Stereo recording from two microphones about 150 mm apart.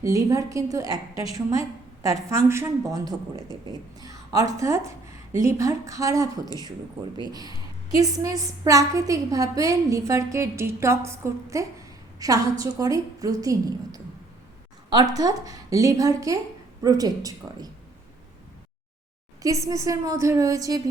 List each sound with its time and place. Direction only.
0.0 s a woman's voice: 20° right (ahead or behind)
7.9 s a woman's voice: 25° right (ahead or behind)
15.1 s a woman's voice: 25° right (ahead or behind)
19.4 s a woman's voice: 20° right (ahead or behind)